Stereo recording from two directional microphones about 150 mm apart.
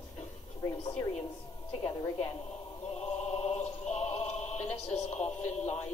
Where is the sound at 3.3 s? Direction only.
45° left (ahead or behind).